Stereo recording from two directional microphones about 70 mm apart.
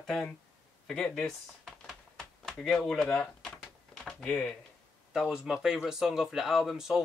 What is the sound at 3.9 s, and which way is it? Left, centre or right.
Typing, centre.